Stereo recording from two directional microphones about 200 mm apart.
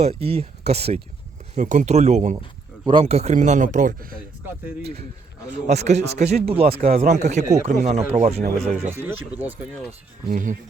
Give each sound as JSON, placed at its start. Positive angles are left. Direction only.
{"t": 0.0, "sound": "speech", "side_deg": -30}
{"t": 5.6, "sound": "speech", "side_deg": -35}
{"t": 8.9, "sound": "speech", "side_deg": -10}
{"t": 10.2, "sound": "speech", "side_deg": -40}